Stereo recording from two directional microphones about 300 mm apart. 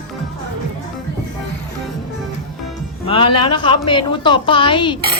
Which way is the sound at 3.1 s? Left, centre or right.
Centre.